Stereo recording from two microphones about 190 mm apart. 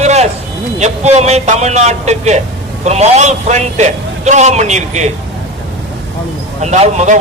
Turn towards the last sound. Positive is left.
turn(degrees=-40)  # may be behind; listen again after turning